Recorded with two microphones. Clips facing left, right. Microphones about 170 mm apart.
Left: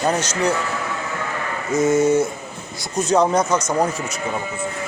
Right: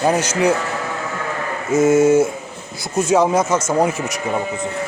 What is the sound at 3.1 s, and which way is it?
Speech, 5° right (ahead or behind).